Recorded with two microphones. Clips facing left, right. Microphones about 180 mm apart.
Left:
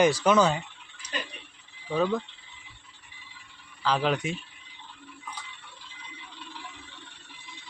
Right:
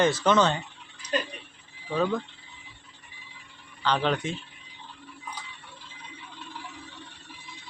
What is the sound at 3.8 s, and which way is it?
Speech, 5° left (ahead or behind).